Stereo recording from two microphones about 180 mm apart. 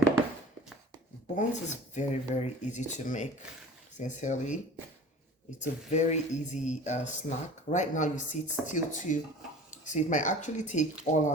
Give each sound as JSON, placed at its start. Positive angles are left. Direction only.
{"t": 1.4, "sound": "speech", "side_deg": 40}